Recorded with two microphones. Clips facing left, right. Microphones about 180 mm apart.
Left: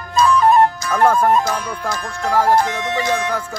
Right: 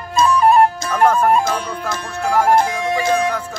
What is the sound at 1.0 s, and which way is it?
Speech, 10° right (ahead or behind).